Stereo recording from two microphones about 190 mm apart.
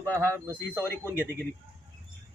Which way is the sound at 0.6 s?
10° left (ahead or behind).